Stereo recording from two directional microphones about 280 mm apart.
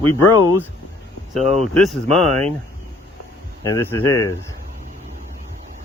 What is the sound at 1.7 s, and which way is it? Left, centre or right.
Speech, centre.